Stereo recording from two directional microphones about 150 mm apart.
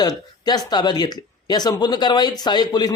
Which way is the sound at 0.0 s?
25° left (ahead or behind).